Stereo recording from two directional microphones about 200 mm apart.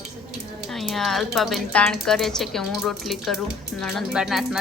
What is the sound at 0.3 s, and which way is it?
Speech, centre (ahead or behind).